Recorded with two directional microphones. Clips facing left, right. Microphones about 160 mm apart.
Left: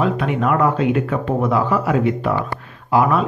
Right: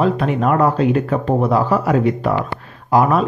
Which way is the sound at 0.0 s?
35° right (ahead or behind).